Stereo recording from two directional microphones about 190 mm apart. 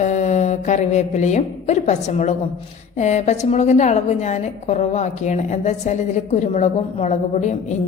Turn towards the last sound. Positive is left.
turn(degrees=40)  # may be behind; listen again after turning